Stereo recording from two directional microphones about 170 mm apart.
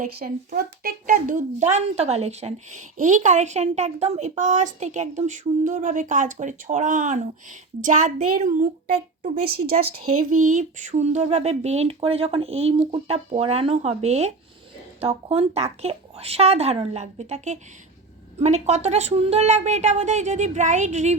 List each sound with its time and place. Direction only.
0.0 s a woman's voice: 65° right (ahead or behind)
9.7 s a woman's voice: 40° right (ahead or behind)